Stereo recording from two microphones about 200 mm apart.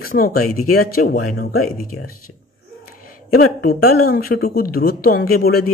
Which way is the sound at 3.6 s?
50° left (ahead or behind).